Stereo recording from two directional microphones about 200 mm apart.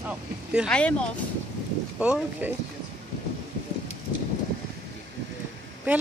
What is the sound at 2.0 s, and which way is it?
Speech, 5° right (ahead or behind).